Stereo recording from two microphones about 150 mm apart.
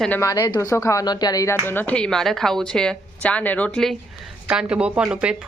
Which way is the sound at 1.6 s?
10° left (ahead or behind).